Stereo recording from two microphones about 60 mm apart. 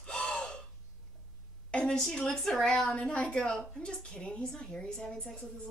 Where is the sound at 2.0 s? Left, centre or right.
Centre.